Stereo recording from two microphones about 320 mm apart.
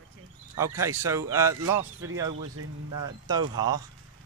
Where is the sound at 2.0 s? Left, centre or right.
Right.